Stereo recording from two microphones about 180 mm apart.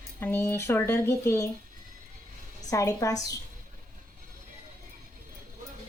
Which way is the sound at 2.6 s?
20° left (ahead or behind).